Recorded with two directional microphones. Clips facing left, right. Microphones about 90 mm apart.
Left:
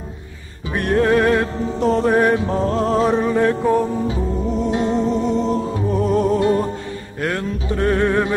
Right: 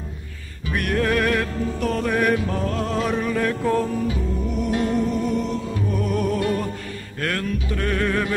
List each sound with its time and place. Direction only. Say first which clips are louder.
0.7 s music: left 5 dB; 30° left (ahead or behind)